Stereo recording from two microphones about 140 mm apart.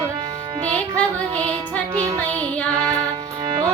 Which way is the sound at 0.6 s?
10° left (ahead or behind).